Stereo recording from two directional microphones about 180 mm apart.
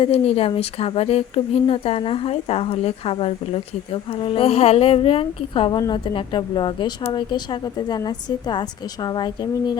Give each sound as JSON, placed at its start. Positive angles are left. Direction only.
{"t": 0.0, "sound": "speech", "side_deg": 35}